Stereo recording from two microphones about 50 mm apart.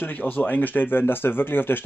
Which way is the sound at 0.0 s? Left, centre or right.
Left.